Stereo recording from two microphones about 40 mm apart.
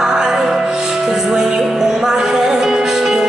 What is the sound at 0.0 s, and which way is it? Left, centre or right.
Music, centre.